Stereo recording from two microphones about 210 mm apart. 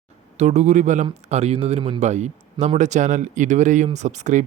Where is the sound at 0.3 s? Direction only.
30° right (ahead or behind).